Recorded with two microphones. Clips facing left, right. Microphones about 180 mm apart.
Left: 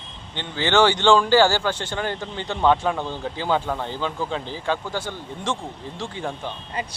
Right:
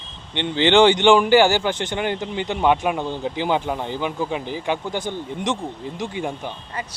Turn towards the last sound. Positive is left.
turn(degrees=-15)  # may be behind; listen again after turning